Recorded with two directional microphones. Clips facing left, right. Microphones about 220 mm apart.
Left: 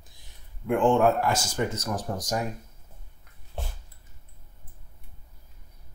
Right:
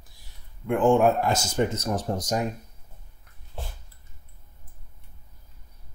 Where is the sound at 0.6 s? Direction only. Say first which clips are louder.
Right 1 dB; 5° right (ahead or behind); by 2.5 s 25° right (ahead or behind).